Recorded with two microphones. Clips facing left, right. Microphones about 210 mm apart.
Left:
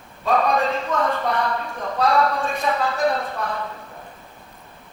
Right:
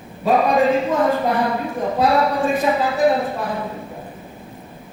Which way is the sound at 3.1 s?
15° right (ahead or behind).